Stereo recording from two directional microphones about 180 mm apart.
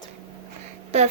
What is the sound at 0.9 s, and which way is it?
Speech, 35° right (ahead or behind).